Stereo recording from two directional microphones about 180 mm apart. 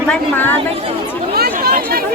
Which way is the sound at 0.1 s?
10° left (ahead or behind).